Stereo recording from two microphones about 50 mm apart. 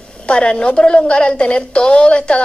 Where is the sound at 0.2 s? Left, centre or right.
Centre.